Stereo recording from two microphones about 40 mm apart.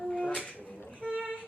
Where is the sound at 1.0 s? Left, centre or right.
Right.